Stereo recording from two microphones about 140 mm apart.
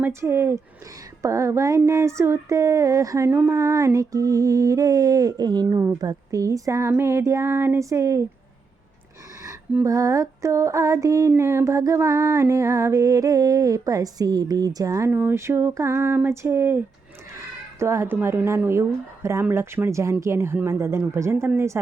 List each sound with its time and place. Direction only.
0.0 s female singing: 20° right (ahead or behind)
5.6 s female singing: 20° right (ahead or behind)
9.8 s female singing: 20° right (ahead or behind)